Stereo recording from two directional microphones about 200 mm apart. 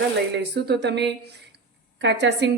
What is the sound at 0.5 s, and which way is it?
Speech, 55° right (ahead or behind).